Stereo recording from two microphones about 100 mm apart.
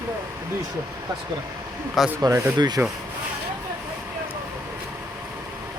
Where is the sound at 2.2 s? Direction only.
35° right (ahead or behind).